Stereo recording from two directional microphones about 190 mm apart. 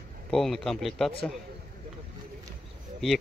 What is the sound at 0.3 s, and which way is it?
Speech, centre (ahead or behind).